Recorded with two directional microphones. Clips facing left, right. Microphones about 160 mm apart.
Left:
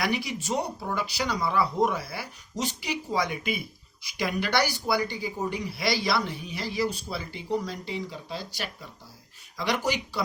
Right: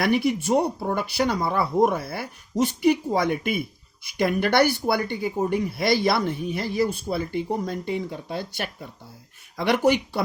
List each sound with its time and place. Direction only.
0.0 s speech: 55° right (ahead or behind)